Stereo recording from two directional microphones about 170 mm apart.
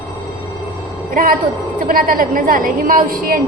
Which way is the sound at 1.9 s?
55° right (ahead or behind).